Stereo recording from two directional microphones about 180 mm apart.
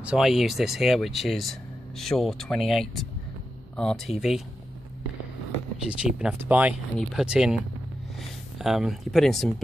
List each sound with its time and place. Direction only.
0.0 s speech: 5° right (ahead or behind)
5.9 s speech: 5° right (ahead or behind)